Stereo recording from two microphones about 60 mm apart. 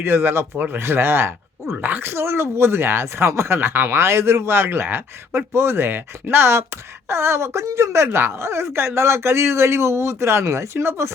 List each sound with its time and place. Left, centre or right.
0.0 s speech: right
1.7 s speech: right